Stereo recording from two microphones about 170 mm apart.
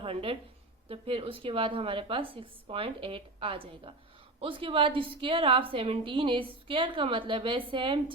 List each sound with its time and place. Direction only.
0.0 s a woman's voice: 30° right (ahead or behind)